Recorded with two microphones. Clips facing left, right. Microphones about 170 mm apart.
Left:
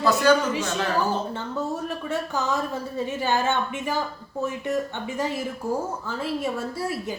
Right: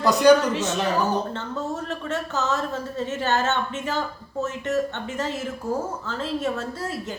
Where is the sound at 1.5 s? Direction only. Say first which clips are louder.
Left 1 dB; 10° left (ahead or behind).